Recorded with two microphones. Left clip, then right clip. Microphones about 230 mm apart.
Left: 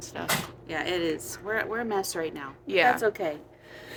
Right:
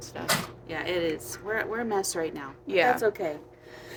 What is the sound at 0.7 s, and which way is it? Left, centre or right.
Speech, left.